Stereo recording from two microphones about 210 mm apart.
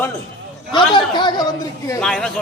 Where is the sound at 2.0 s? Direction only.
5° left (ahead or behind).